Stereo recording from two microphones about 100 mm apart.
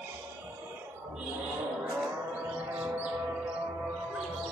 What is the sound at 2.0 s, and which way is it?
Music, 15° right (ahead or behind).